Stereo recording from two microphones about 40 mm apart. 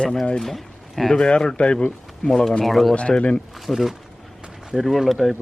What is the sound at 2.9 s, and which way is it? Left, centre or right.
Speech, left.